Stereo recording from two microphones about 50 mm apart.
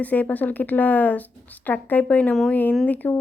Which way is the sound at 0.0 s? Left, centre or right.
Left.